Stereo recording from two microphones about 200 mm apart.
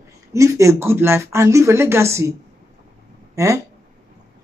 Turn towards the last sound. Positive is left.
turn(degrees=-15)  # may be behind; listen again after turning